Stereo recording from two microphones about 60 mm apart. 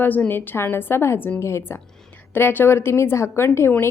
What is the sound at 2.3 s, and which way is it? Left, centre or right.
A woman's voice, left.